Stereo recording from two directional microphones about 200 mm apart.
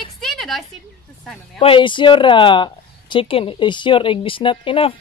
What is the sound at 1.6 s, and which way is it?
Speech, 25° left (ahead or behind).